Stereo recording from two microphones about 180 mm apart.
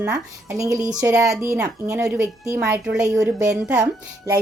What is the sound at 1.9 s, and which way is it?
A woman's voice, 5° right (ahead or behind).